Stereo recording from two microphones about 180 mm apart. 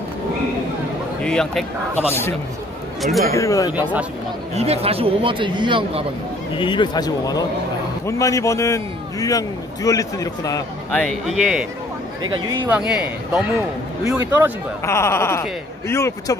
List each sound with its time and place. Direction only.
1.2 s speech: 5° left (ahead or behind)
2.0 s a man's voice: 15° left (ahead or behind)
3.0 s speech: centre (ahead or behind)
3.3 s a man's voice: 20° left (ahead or behind)
4.6 s speech: 35° right (ahead or behind)
6.5 s a man's voice: 25° left (ahead or behind)
10.9 s speech: 5° left (ahead or behind)
12.6 s a man's voice: 5° right (ahead or behind)
14.9 s a man's voice: 15° left (ahead or behind)